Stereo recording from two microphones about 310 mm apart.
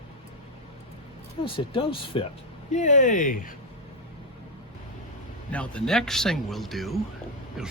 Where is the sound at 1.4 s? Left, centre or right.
Centre.